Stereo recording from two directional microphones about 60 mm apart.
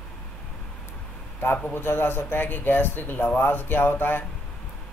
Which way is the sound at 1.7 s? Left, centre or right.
Left.